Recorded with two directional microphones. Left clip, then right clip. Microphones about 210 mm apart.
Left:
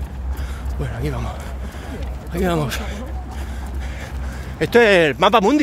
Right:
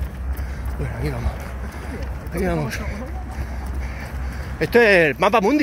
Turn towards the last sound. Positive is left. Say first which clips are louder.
# left 3 dB
turn(degrees=15)  # may be behind; listen again after turning